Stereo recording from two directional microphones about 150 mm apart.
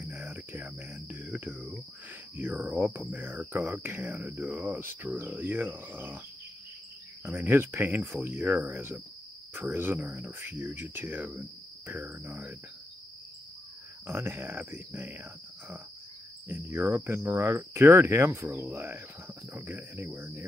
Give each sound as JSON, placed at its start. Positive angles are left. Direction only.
{"t": 0.0, "sound": "cricket", "side_deg": -10}
{"t": 2.3, "sound": "speech", "side_deg": -10}
{"t": 7.2, "sound": "speech", "side_deg": -15}
{"t": 14.0, "sound": "speech", "side_deg": -15}
{"t": 16.4, "sound": "speech", "side_deg": -15}